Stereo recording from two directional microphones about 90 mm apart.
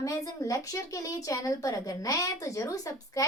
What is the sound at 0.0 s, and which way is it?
Speech, 40° left (ahead or behind).